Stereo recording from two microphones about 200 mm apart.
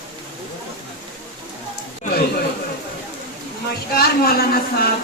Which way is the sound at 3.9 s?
50° left (ahead or behind).